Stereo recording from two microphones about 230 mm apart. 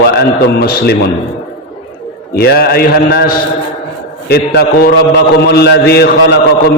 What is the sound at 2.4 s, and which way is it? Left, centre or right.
Speech, left.